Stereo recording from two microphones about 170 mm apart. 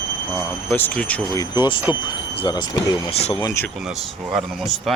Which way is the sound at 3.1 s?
35° left (ahead or behind).